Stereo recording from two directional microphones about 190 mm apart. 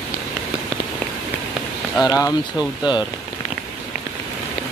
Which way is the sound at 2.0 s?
20° left (ahead or behind).